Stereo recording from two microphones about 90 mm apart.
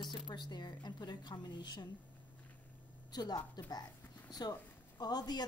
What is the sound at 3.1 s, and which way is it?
A woman's voice, 50° left (ahead or behind).